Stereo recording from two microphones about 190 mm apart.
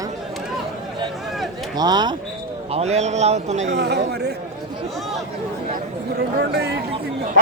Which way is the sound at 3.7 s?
65° right (ahead or behind).